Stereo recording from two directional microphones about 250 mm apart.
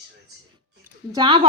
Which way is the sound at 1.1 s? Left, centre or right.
Centre.